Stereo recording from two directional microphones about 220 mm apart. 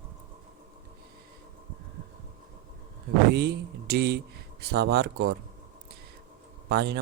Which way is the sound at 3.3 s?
45° right (ahead or behind).